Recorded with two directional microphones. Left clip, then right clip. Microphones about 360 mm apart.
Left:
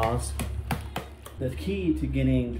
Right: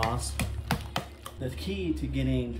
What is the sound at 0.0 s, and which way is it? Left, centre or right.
Speech, centre.